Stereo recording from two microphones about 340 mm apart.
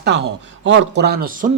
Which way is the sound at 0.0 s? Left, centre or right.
Right.